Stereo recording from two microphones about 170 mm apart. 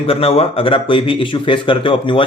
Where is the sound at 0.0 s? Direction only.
35° left (ahead or behind).